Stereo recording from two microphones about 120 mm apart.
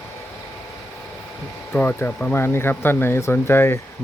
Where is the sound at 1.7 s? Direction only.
15° left (ahead or behind).